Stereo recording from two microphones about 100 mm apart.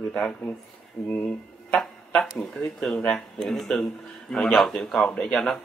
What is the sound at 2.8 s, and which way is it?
Speech, 5° left (ahead or behind).